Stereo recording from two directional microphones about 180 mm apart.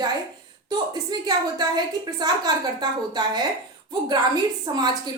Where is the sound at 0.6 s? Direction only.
25° right (ahead or behind).